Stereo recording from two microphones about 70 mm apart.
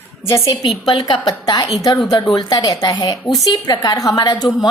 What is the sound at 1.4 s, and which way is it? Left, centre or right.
A woman's voice, left.